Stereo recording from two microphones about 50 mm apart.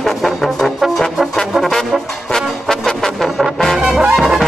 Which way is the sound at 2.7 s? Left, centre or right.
Centre.